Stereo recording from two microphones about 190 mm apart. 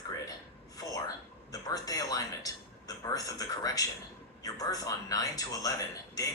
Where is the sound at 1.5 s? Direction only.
20° left (ahead or behind).